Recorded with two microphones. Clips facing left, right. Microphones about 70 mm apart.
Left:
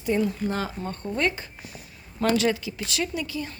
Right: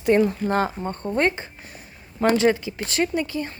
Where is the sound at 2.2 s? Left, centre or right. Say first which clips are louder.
Right 4 dB; right.